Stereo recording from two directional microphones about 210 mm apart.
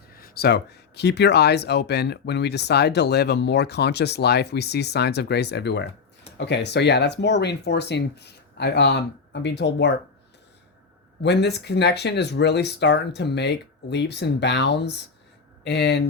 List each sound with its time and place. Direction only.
0.1 s speech: 45° left (ahead or behind)
11.2 s speech: 55° left (ahead or behind)